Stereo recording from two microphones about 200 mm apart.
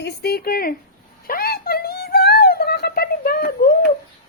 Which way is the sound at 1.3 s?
50° left (ahead or behind).